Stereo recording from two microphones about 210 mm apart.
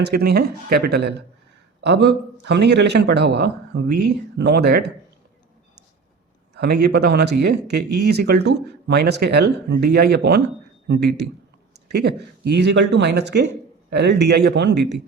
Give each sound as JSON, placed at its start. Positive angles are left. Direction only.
{"t": 0.0, "sound": "speech", "side_deg": -50}
{"t": 6.5, "sound": "speech", "side_deg": -50}